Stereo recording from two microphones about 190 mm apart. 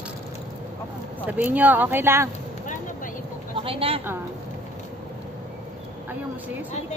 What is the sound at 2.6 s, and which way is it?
Vehicle, 45° left (ahead or behind).